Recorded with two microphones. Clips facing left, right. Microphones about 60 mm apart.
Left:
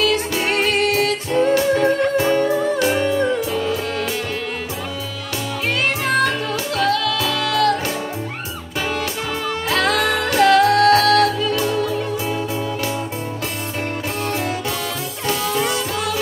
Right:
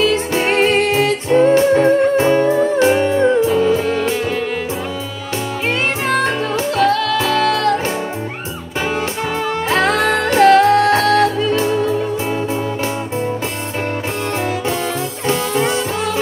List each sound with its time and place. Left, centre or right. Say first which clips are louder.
0.0 s music: right 3 dB; right
6.0 s music: right 2 dB; right
9.7 s music: right 3 dB; right
15.2 s music: right 3 dB; right